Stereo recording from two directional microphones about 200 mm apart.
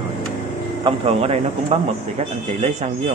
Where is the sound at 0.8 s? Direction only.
30° right (ahead or behind).